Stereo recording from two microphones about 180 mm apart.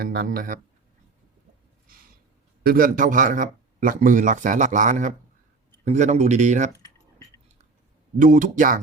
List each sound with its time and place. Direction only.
0.0 s speech: 55° right (ahead or behind)
2.6 s speech: 50° right (ahead or behind)
8.2 s speech: 45° right (ahead or behind)